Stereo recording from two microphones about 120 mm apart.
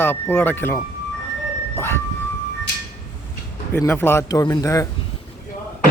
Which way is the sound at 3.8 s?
20° left (ahead or behind).